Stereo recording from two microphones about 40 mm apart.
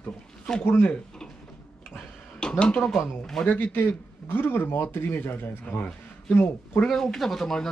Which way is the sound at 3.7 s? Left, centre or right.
Left.